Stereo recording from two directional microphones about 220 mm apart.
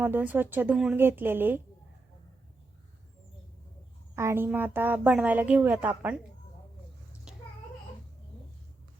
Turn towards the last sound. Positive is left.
turn(degrees=-5)  # may be behind; listen again after turning